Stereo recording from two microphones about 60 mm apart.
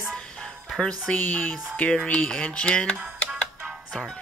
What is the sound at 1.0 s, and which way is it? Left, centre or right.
Speech, left.